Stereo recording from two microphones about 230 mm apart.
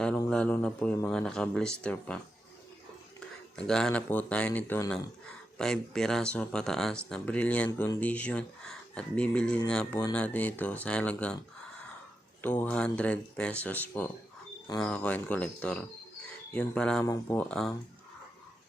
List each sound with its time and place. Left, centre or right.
0.3 s speech: centre
3.5 s speech: centre
12.4 s speech: centre